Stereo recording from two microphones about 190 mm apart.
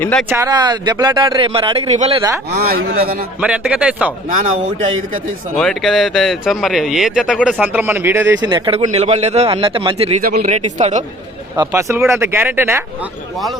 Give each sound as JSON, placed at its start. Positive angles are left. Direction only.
{"t": 0.0, "sound": "speech", "side_deg": 5}
{"t": 0.3, "sound": "a man's voice", "side_deg": -15}
{"t": 2.6, "sound": "speech", "side_deg": -55}
{"t": 3.4, "sound": "speech", "side_deg": -5}
{"t": 5.5, "sound": "speech", "side_deg": 0}
{"t": 10.2, "sound": "speech", "side_deg": -50}
{"t": 10.5, "sound": "speech", "side_deg": -35}
{"t": 11.5, "sound": "speech", "side_deg": -20}
{"t": 13.3, "sound": "speech", "side_deg": 0}